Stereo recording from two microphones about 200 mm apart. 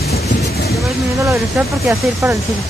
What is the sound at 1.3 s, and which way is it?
Speech, 10° right (ahead or behind).